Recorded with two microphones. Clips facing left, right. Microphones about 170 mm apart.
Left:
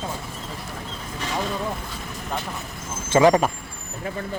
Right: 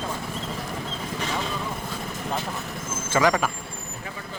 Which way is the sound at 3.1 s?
25° left (ahead or behind).